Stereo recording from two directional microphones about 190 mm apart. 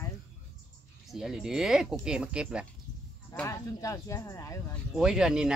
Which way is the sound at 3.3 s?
15° left (ahead or behind).